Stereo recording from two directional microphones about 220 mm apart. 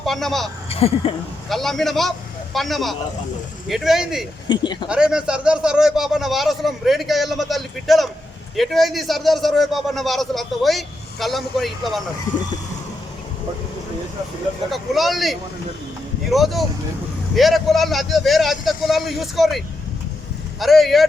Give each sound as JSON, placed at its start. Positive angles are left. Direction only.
{"t": 0.0, "sound": "speech", "side_deg": 0}
{"t": 0.7, "sound": "speech", "side_deg": 25}
{"t": 1.5, "sound": "a man's voice", "side_deg": 0}
{"t": 4.4, "sound": "speech", "side_deg": 20}
{"t": 4.9, "sound": "a man's voice", "side_deg": -5}
{"t": 14.7, "sound": "a man's voice", "side_deg": 0}